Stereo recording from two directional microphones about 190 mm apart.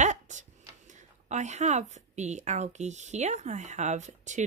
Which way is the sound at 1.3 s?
40° right (ahead or behind).